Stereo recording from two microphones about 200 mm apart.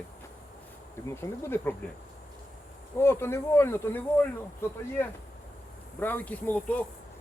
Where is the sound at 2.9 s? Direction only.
10° left (ahead or behind).